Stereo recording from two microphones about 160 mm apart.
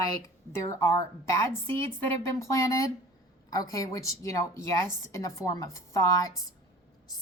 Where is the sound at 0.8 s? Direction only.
15° left (ahead or behind).